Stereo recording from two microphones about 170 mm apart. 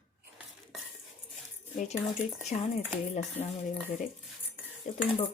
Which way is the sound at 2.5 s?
40° left (ahead or behind).